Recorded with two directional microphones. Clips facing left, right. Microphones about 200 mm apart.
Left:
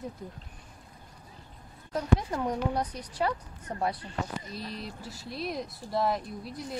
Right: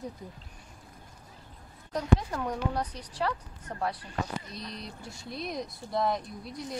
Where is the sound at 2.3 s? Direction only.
15° left (ahead or behind).